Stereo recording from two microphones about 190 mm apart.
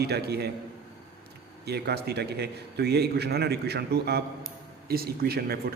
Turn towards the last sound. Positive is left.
turn(degrees=-55)  # may be behind; listen again after turning